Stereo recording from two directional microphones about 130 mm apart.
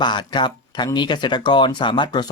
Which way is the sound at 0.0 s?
35° left (ahead or behind).